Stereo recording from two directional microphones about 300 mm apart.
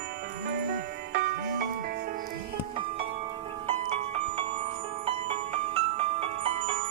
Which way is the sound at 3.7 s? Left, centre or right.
Centre.